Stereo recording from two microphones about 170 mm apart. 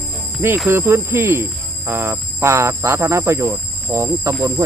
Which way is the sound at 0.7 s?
15° right (ahead or behind).